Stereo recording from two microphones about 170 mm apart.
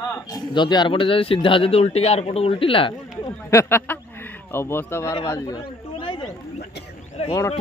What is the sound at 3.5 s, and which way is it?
Speech, 15° left (ahead or behind).